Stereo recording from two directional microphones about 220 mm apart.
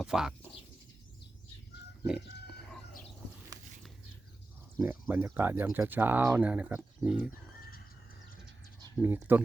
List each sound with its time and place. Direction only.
0.0 s bird: centre (ahead or behind)
4.8 s speech: 10° right (ahead or behind)
9.0 s speech: 10° right (ahead or behind)